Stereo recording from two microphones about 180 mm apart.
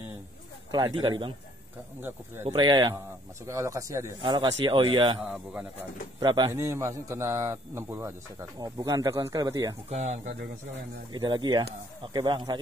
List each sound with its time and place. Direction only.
0.7 s speech: 25° right (ahead or behind)
2.0 s a man's voice: 10° right (ahead or behind)
2.4 s speech: 25° right (ahead or behind)
5.3 s a man's voice: 5° right (ahead or behind)
6.1 s a man's voice: 25° right (ahead or behind)
9.8 s speech: 40° right (ahead or behind)
11.1 s speech: 25° right (ahead or behind)